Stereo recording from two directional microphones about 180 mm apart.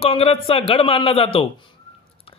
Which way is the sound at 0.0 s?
30° left (ahead or behind).